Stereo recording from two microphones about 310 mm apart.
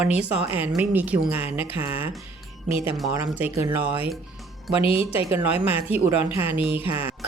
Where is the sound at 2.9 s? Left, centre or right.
Centre.